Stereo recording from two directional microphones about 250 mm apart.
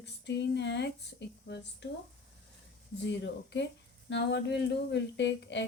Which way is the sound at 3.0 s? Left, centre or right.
Left.